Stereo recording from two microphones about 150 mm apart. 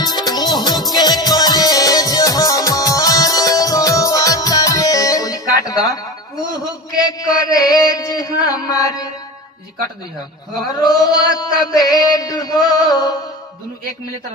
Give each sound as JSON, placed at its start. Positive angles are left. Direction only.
{"t": 0.0, "sound": "music", "side_deg": 25}
{"t": 6.9, "sound": "chant", "side_deg": 25}
{"t": 10.5, "sound": "chant", "side_deg": 25}